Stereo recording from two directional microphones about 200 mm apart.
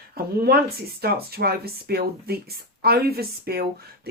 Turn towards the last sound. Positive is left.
turn(degrees=-50)  # may be behind; listen again after turning